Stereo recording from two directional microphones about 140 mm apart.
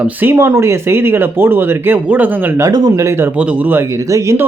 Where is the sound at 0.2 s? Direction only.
15° right (ahead or behind).